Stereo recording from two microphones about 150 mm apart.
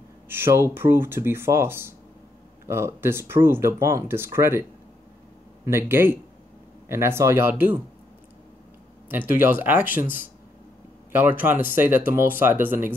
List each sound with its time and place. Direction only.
0.3 s speech: 15° right (ahead or behind)
5.7 s speech: 15° right (ahead or behind)
9.1 s speech: 15° right (ahead or behind)